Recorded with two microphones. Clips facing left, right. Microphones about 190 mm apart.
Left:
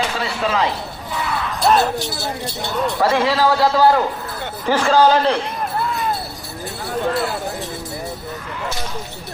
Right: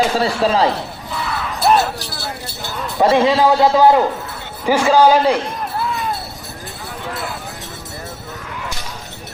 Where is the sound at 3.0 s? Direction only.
20° right (ahead or behind).